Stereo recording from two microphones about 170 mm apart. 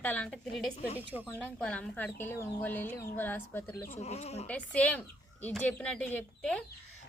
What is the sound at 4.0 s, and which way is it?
Speech, 40° left (ahead or behind).